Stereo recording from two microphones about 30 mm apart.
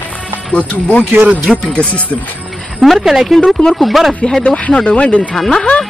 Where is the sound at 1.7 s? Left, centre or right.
Left.